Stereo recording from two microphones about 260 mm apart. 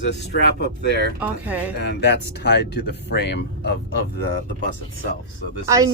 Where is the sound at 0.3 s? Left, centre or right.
Left.